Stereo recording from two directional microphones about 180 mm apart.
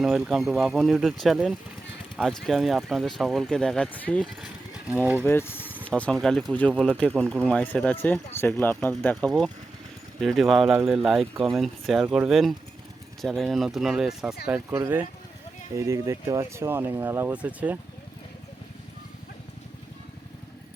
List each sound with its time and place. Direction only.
0.0 s speech: 5° right (ahead or behind)
5.2 s speech: 15° left (ahead or behind)
10.2 s speech: centre (ahead or behind)
14.7 s speech: 15° right (ahead or behind)